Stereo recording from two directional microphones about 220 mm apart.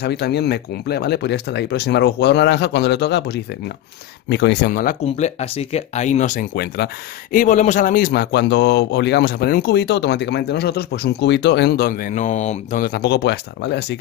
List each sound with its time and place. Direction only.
0.0 s a man's voice: 50° left (ahead or behind)
7.3 s a man's voice: 35° left (ahead or behind); by 13.9 s 50° left (ahead or behind)